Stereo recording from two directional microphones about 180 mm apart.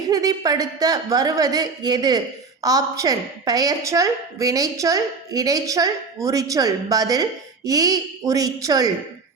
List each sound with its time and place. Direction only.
0.1 s a woman's voice: 20° right (ahead or behind)